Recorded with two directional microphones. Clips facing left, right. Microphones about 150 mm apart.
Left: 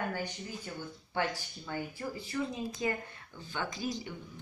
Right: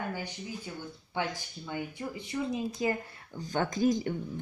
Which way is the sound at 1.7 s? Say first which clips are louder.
Right 1 dB; 20° right (ahead or behind).